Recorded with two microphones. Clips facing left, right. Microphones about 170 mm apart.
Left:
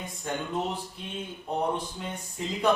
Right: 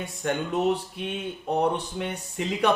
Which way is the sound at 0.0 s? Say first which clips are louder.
Right 5 dB; 75° right (ahead or behind).